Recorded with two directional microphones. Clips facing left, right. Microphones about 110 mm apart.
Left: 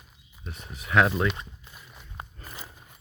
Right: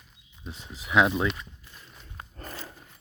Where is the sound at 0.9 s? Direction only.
15° right (ahead or behind).